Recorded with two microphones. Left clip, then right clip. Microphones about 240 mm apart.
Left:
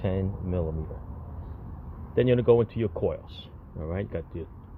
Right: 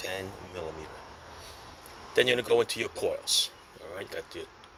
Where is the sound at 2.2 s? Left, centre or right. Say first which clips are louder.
Left 3 dB; centre.